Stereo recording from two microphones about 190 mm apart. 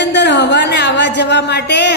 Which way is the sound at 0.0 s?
65° left (ahead or behind).